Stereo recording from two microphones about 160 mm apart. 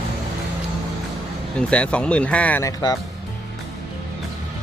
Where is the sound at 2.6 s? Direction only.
25° left (ahead or behind).